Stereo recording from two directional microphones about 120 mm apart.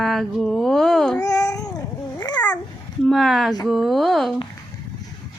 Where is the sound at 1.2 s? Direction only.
30° left (ahead or behind).